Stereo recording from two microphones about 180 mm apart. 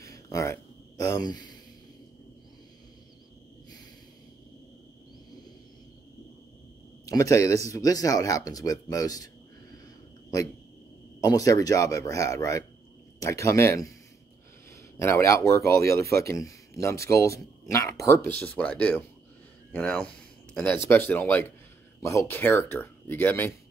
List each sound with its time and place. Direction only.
0.0 s a sound: 20° left (ahead or behind)
7.1 s speech: 15° left (ahead or behind)
11.1 s speech: 20° left (ahead or behind)
15.0 s speech: 15° left (ahead or behind)